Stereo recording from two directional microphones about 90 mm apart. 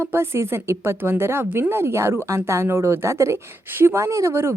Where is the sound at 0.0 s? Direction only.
25° right (ahead or behind).